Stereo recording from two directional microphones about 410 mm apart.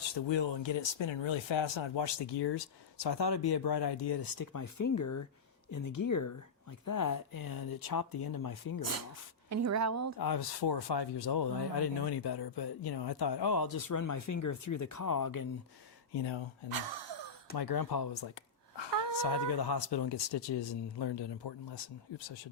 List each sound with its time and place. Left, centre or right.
0.1 s speech: left
9.5 s a woman's voice: right
10.2 s speech: left
13.7 s speech: left
16.1 s speech: left
16.7 s a sound: right
17.6 s speech: left
18.8 s speech: left